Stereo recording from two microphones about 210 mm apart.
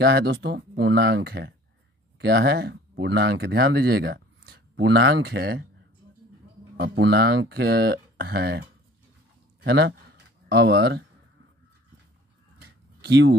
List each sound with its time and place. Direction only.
0.0 s speech: 50° right (ahead or behind)
6.8 s a man's voice: 50° right (ahead or behind)
12.5 s a sound: 55° right (ahead or behind)